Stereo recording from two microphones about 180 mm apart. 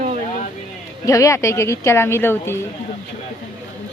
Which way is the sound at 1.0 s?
15° left (ahead or behind).